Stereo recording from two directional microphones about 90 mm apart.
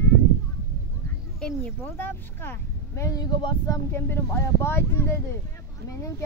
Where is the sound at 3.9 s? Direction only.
25° left (ahead or behind).